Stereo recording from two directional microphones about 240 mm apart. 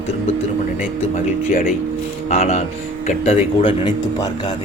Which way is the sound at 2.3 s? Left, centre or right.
Left.